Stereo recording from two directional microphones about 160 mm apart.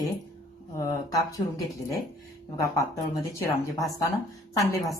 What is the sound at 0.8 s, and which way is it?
A woman's voice, 20° left (ahead or behind).